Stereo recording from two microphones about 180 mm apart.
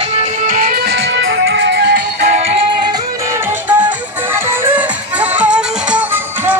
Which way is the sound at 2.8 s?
15° right (ahead or behind).